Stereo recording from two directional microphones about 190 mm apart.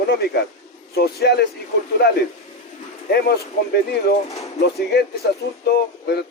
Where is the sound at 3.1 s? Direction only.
55° left (ahead or behind).